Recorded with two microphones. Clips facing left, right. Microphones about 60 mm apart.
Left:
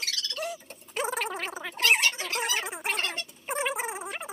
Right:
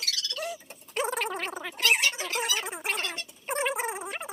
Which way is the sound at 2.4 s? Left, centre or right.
Left.